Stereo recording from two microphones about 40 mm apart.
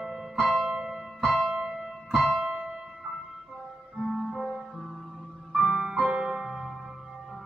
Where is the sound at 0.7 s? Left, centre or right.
Centre.